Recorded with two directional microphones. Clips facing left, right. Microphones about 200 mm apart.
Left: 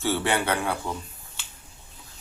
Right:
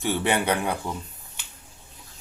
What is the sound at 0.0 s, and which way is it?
Speech, 15° right (ahead or behind).